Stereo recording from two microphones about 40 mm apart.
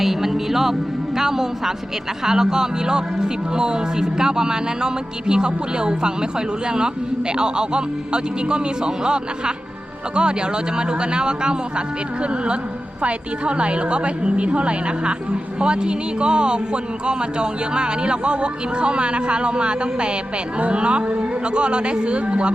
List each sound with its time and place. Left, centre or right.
0.0 s speech: centre; by 22.5 s right